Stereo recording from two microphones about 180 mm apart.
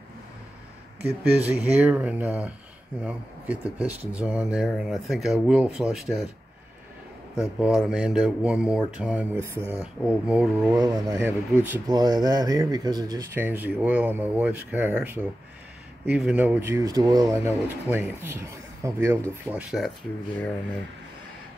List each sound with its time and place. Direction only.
1.0 s speech: 10° right (ahead or behind)
7.3 s speech: 5° right (ahead or behind)
10.7 s speech: 20° right (ahead or behind)
11.9 s speech: 20° right (ahead or behind)
19.5 s speech: centre (ahead or behind)